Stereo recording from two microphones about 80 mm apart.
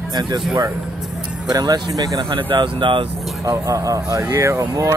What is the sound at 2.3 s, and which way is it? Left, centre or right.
Speech, right.